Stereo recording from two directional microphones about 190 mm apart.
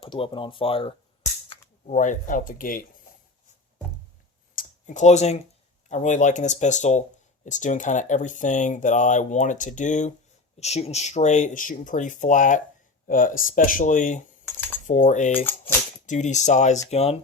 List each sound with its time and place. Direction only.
0.0 s speech: 25° left (ahead or behind)
1.9 s speech: 40° left (ahead or behind)
4.5 s computer keyboard: 40° left (ahead or behind)
5.9 s speech: 40° left (ahead or behind)
14.4 s typing: 15° left (ahead or behind)
14.8 s speech: 40° left (ahead or behind)